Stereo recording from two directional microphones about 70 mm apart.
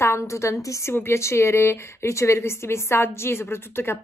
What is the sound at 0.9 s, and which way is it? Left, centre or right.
A woman's voice, left.